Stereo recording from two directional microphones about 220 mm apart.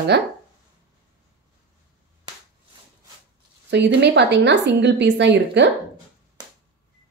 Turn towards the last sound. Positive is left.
turn(degrees=-50)  # may be behind; listen again after turning